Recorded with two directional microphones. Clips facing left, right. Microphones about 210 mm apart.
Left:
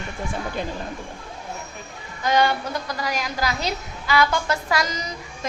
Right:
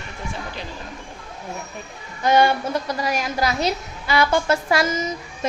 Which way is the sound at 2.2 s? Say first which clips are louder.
Right 3 dB; 25° right (ahead or behind).